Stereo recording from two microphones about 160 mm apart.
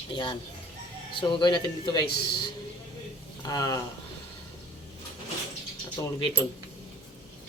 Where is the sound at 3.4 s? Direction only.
25° left (ahead or behind).